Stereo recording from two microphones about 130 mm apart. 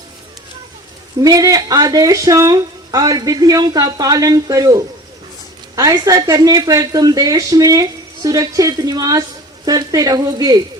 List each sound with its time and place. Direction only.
1.2 s speech: 25° right (ahead or behind)